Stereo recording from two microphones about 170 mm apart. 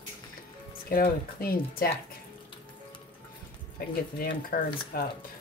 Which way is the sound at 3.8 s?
60° left (ahead or behind).